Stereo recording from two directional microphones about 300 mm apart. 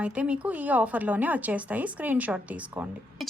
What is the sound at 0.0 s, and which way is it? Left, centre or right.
Speech, centre.